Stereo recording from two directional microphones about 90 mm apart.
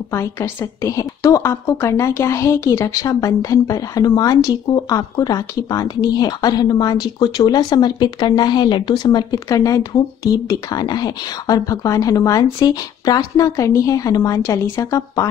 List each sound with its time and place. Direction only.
0.1 s a woman's voice: 30° left (ahead or behind)